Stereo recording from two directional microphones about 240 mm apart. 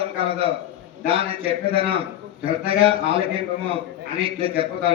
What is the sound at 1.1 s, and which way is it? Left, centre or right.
A man's voice, right.